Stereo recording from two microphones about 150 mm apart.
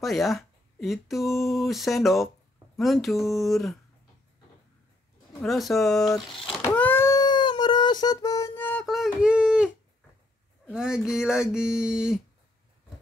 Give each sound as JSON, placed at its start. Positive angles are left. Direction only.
{"t": 0.0, "sound": "speech", "side_deg": 0}
{"t": 5.4, "sound": "speech", "side_deg": 0}
{"t": 6.6, "sound": "a sound", "side_deg": 10}
{"t": 8.8, "sound": "speech", "side_deg": 0}
{"t": 10.7, "sound": "speech", "side_deg": -5}